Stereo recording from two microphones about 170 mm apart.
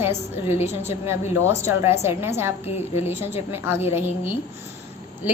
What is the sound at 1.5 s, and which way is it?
A woman's voice, 15° right (ahead or behind).